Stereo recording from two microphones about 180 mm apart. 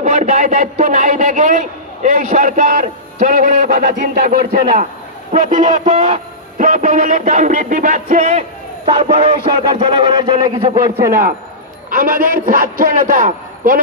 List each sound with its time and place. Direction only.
0.0 s a man's voice: 45° right (ahead or behind)
5.9 s a man's voice: 35° right (ahead or behind)
8.8 s music: 30° right (ahead or behind)
11.9 s a man's voice: 50° right (ahead or behind)